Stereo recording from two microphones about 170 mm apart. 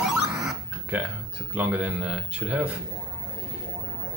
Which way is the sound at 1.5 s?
10° right (ahead or behind).